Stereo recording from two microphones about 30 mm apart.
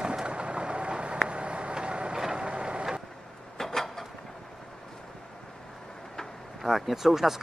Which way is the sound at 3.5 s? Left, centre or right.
Centre.